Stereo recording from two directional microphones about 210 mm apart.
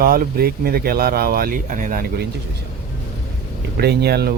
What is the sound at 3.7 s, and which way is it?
Speech, 50° right (ahead or behind).